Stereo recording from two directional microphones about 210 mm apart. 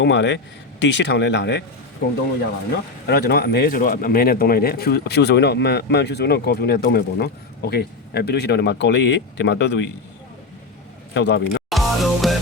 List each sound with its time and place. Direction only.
0.0 s speech: 55° left (ahead or behind)
11.1 s speech: 55° left (ahead or behind)
11.7 s music: centre (ahead or behind)